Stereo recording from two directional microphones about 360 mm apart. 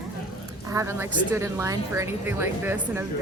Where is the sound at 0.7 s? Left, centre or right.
Centre.